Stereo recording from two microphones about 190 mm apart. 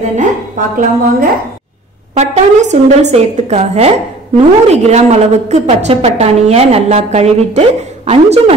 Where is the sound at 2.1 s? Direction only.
35° right (ahead or behind).